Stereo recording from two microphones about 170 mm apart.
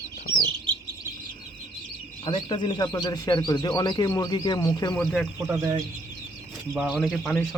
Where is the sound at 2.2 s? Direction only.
30° left (ahead or behind).